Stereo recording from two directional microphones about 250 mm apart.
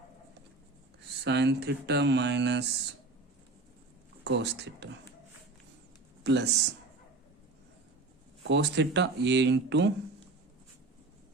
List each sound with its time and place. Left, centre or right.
1.2 s speech: right
4.2 s speech: right
6.2 s speech: right
8.4 s speech: right